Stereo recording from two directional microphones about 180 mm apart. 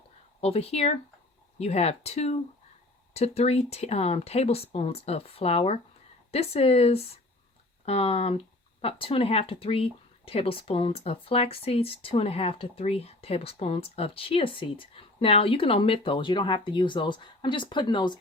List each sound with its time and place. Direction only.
0.4 s speech: 35° left (ahead or behind)